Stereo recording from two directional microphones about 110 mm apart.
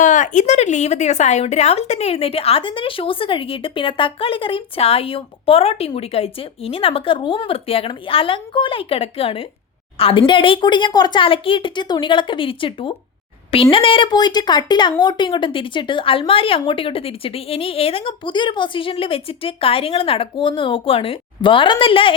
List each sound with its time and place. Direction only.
0.3 s a woman's voice: 90° left; by 22.1 s 50° left (ahead or behind)